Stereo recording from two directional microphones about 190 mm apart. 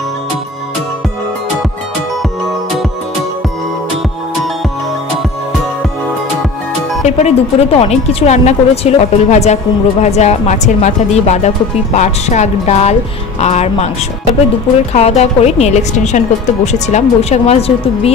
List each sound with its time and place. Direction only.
7.1 s a woman's voice: 35° left (ahead or behind)
14.9 s a woman's voice: 35° left (ahead or behind)